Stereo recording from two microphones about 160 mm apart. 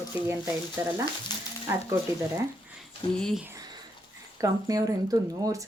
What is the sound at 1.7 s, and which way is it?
Speech, 15° right (ahead or behind).